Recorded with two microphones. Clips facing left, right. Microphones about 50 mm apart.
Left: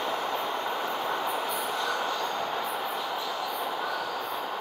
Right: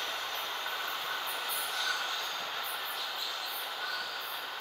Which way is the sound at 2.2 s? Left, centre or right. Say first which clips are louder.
Left 8 dB; left.